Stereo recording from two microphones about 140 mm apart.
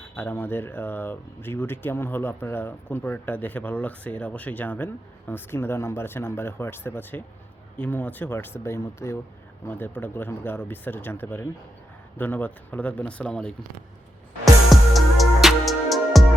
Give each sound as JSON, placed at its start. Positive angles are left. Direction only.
{"t": 0.2, "sound": "speech", "side_deg": 15}
{"t": 14.7, "sound": "music", "side_deg": 0}